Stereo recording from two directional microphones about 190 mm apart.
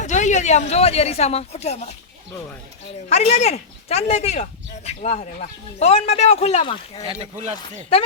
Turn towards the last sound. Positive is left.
turn(degrees=-30)  # may be behind; listen again after turning